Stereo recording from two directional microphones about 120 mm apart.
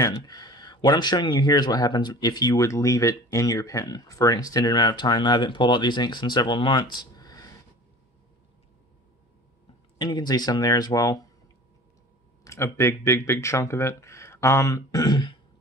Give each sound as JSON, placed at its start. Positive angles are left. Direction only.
{"t": 0.0, "sound": "speech", "side_deg": 30}
{"t": 9.9, "sound": "speech", "side_deg": 35}
{"t": 12.4, "sound": "speech", "side_deg": 25}